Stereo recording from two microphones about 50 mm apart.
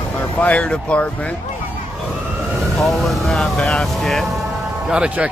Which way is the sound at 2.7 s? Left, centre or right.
Centre.